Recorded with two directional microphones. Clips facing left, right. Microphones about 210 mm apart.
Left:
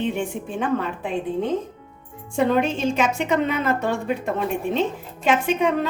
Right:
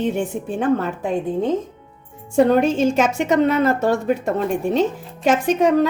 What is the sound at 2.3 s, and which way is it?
A woman's voice, 45° right (ahead or behind).